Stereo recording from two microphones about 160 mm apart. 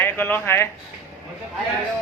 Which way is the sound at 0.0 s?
10° left (ahead or behind).